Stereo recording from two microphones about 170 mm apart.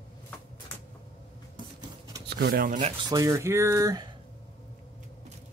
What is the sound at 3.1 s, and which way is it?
Speech, 20° right (ahead or behind).